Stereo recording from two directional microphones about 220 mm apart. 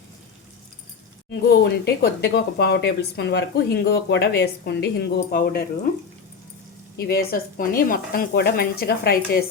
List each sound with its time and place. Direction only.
1.3 s speech: 45° left (ahead or behind)
6.9 s speech: 45° left (ahead or behind)